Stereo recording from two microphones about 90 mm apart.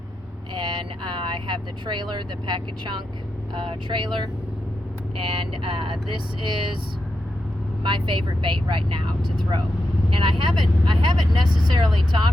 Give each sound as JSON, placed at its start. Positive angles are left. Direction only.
{"t": 0.5, "sound": "speech", "side_deg": -60}
{"t": 5.1, "sound": "speech", "side_deg": -75}
{"t": 6.4, "sound": "speech", "side_deg": -60}
{"t": 7.9, "sound": "speech", "side_deg": -60}